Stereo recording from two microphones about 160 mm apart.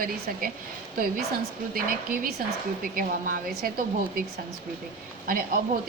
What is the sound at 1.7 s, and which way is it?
A woman's voice, 65° right (ahead or behind).